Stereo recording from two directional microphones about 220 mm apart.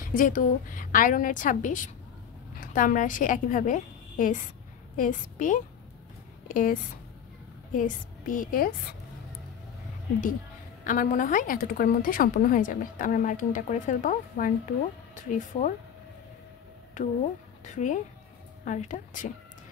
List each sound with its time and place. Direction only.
0.0 s a woman's voice: 40° left (ahead or behind)
10.8 s a woman's voice: 35° left (ahead or behind)
17.6 s a woman's voice: 35° left (ahead or behind)